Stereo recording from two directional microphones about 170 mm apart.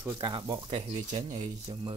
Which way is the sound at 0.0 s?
25° right (ahead or behind).